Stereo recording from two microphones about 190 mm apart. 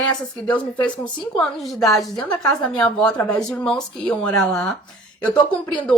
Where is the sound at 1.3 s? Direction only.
Centre (ahead or behind).